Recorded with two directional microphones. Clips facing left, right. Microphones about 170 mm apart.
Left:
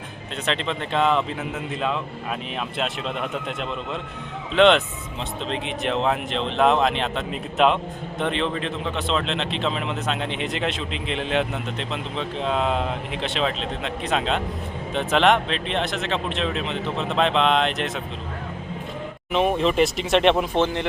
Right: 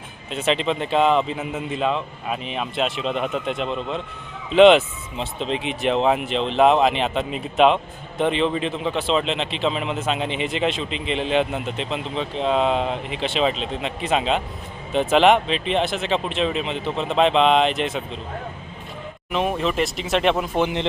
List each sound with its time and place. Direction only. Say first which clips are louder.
0.3 s speech: right 5 dB; 5° right (ahead or behind)
19.3 s speech: left 2 dB; centre (ahead or behind)
20.6 s speech: even; 15° right (ahead or behind)